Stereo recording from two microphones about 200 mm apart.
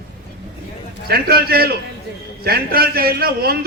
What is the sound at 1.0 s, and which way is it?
A man's voice, 50° right (ahead or behind).